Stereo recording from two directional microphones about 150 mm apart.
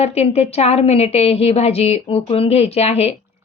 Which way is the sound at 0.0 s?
45° left (ahead or behind).